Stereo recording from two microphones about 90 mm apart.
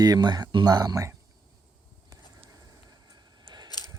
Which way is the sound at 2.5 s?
40° right (ahead or behind).